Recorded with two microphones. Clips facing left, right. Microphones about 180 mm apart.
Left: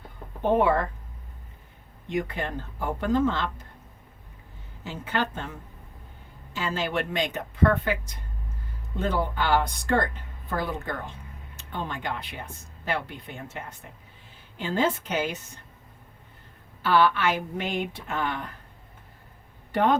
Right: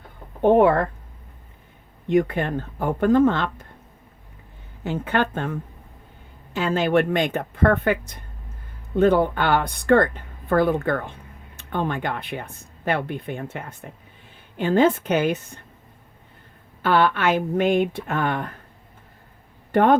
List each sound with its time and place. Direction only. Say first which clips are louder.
0.4 s speech: right 6 dB; 50° right (ahead or behind)
2.0 s speech: right 9 dB; 55° right (ahead or behind)
4.8 s speech: right 6 dB; 55° right (ahead or behind)
16.8 s speech: right 3 dB; 55° right (ahead or behind)
19.7 s speech: right 6 dB; 55° right (ahead or behind)